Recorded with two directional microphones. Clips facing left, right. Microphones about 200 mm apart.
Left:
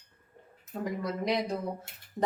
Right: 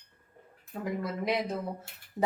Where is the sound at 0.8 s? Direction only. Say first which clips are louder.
Even; 5° right (ahead or behind).